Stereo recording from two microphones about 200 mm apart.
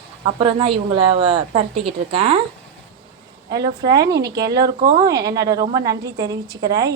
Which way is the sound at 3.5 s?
20° right (ahead or behind).